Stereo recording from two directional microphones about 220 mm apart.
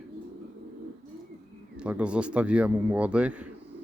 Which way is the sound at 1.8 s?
5° right (ahead or behind).